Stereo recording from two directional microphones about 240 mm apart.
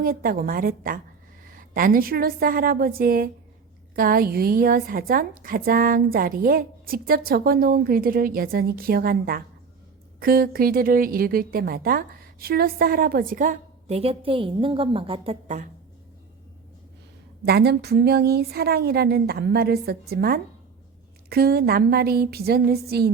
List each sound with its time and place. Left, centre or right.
0.0 s a woman's voice: right
17.4 s a woman's voice: right